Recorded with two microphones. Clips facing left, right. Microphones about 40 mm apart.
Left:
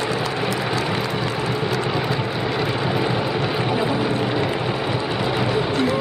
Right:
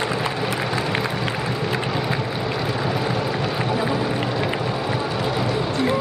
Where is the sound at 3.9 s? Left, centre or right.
Centre.